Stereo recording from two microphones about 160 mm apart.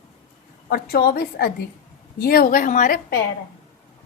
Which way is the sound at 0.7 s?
75° left (ahead or behind).